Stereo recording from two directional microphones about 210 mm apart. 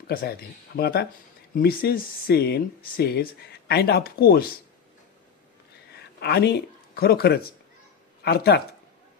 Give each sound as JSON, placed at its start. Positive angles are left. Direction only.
{"t": 0.1, "sound": "speech", "side_deg": 45}
{"t": 5.9, "sound": "a sound", "side_deg": 50}
{"t": 8.2, "sound": "speech", "side_deg": 50}